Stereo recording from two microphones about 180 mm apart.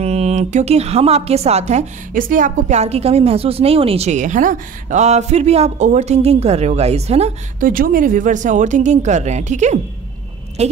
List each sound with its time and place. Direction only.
0.0 s a woman's voice: 35° right (ahead or behind)
7.7 s a woman's voice: 50° right (ahead or behind)